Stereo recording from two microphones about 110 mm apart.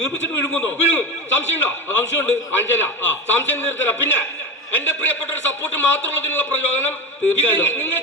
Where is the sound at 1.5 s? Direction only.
20° left (ahead or behind).